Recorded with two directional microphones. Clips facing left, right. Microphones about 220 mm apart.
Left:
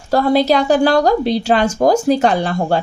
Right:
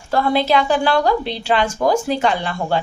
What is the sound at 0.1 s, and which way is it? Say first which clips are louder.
A woman's voice: left 4 dB; 40° left (ahead or behind).